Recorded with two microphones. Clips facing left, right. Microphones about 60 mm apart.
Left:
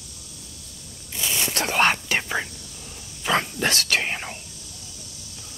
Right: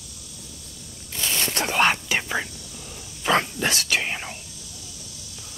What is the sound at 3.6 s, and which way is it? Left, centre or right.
Whispering, left.